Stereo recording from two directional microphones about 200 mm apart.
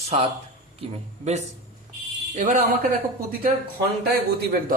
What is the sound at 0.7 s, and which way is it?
A man's voice, 30° right (ahead or behind).